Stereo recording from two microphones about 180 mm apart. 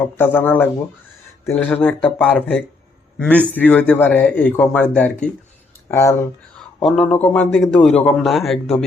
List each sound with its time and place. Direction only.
0.0 s a man's voice: 10° left (ahead or behind)
6.8 s a man's voice: 5° left (ahead or behind)